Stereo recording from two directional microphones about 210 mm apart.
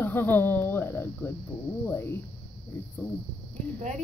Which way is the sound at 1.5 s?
25° left (ahead or behind).